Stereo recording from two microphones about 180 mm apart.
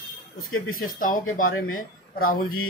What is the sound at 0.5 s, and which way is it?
Speech, 50° left (ahead or behind).